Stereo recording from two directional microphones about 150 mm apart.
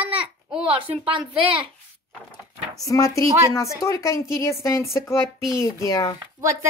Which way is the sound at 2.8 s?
20° left (ahead or behind).